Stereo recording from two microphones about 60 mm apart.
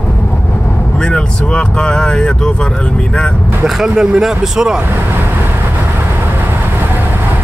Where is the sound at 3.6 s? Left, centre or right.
Centre.